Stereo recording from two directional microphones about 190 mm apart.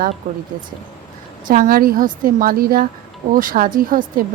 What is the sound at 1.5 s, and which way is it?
A woman's voice, 50° right (ahead or behind).